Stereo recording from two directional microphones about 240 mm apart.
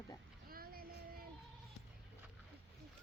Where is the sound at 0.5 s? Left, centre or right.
Right.